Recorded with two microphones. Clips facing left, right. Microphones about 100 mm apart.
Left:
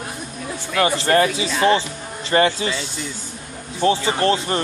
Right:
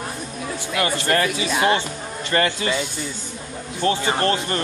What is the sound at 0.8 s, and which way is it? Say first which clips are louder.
Speech: left 4 dB; 25° left (ahead or behind).